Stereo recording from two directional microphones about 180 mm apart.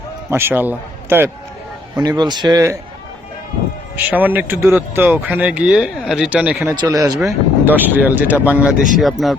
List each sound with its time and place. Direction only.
0.3 s speech: 10° right (ahead or behind)
2.0 s speech: 25° right (ahead or behind)
3.9 s speech: 10° right (ahead or behind)
6.7 s speech: 20° right (ahead or behind)
7.2 s speech: 5° right (ahead or behind)